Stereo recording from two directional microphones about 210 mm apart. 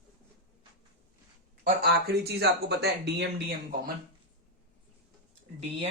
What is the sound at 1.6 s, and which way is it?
Speech, 50° right (ahead or behind).